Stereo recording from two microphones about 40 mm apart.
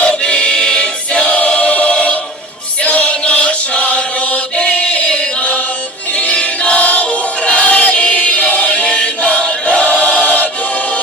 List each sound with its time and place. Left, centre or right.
0.0 s choir: left
2.8 s music: left
4.7 s chant: left
6.1 s music: left
6.8 s choir: left